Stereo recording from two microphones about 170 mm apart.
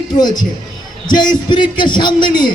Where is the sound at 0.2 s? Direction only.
25° left (ahead or behind).